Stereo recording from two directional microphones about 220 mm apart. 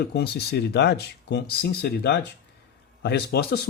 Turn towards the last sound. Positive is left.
turn(degrees=45)  # may be behind; listen again after turning